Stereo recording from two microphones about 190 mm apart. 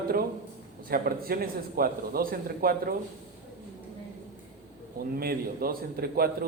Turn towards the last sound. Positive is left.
turn(degrees=-50)  # may be behind; listen again after turning